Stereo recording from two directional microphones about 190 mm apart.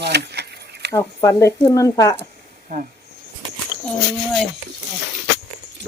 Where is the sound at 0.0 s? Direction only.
60° right (ahead or behind).